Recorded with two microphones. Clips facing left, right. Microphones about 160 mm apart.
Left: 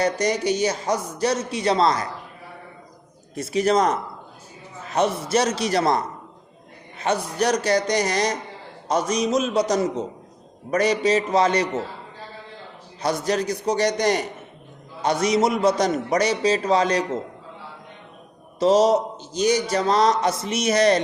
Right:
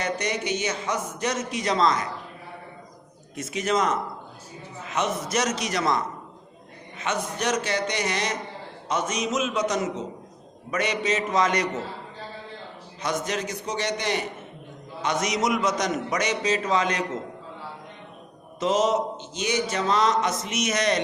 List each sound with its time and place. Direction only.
0.0 s speech: 35° left (ahead or behind)
3.3 s speech: 35° left (ahead or behind)
13.0 s speech: 35° left (ahead or behind)
18.6 s speech: 35° left (ahead or behind)